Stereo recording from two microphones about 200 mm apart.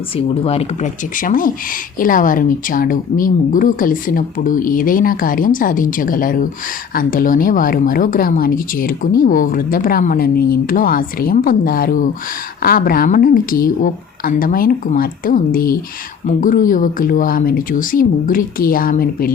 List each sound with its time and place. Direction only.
0.2 s speech: 30° left (ahead or behind); by 19.3 s 45° left (ahead or behind)